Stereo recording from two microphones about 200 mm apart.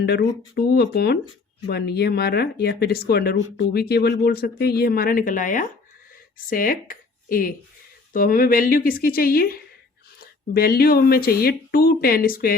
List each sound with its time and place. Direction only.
0.0 s speech: 55° left (ahead or behind)